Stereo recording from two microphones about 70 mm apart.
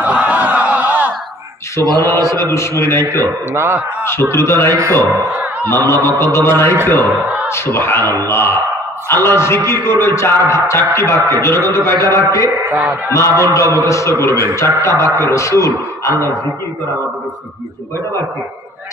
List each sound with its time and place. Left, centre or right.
0.0 s a sound: right
1.8 s a man's voice: left
3.5 s speech: right
4.0 s a man's voice: left
5.1 s speech: right
5.6 s a man's voice: left
8.0 s speech: right
8.3 s a man's voice: left
12.7 s speech: right
13.1 s a man's voice: left